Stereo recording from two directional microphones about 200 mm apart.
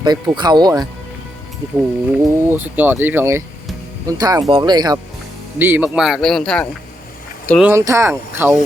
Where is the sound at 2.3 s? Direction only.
10° right (ahead or behind).